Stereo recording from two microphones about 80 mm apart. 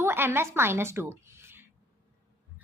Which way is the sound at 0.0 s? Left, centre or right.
Right.